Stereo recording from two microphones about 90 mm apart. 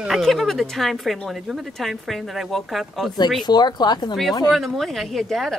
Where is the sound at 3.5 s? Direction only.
50° left (ahead or behind).